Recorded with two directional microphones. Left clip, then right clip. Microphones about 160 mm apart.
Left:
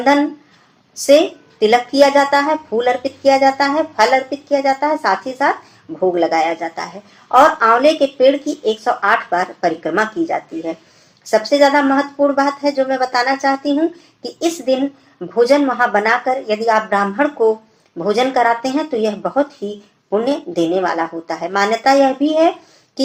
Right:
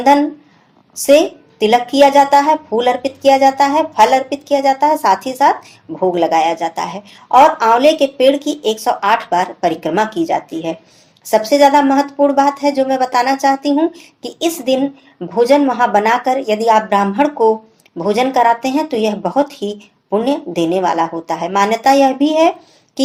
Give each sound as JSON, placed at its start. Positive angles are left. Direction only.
{"t": 0.0, "sound": "a woman's voice", "side_deg": -40}